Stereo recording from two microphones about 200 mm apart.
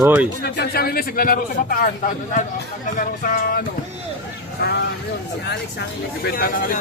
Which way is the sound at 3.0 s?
45° left (ahead or behind).